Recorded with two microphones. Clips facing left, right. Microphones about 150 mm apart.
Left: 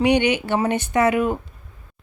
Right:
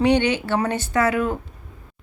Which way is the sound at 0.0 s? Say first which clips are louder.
Even; 15° left (ahead or behind).